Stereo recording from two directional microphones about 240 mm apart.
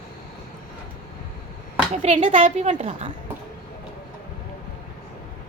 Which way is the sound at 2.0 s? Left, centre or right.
Right.